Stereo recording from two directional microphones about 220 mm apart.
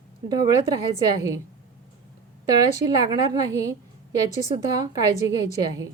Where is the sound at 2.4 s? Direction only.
15° right (ahead or behind).